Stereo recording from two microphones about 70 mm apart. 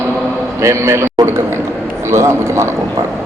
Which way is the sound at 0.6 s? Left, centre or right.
Right.